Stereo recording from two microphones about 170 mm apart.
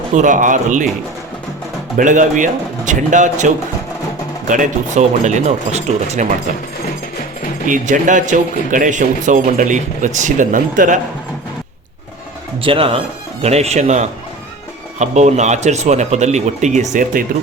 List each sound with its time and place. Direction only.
0.1 s speech: 50° right (ahead or behind)
2.0 s speech: 45° right (ahead or behind)
7.7 s speech: 50° right (ahead or behind)
12.6 s speech: 30° right (ahead or behind); by 17.2 s 50° right (ahead or behind)